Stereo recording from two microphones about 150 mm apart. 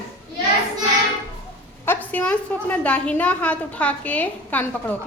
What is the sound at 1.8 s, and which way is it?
A woman's voice, 10° left (ahead or behind).